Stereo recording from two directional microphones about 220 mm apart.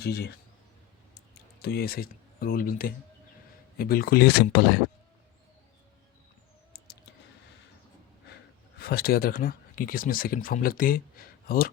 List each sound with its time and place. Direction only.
0.0 s speech: 45° left (ahead or behind)
1.5 s speech: 45° left (ahead or behind)
8.8 s speech: 45° left (ahead or behind)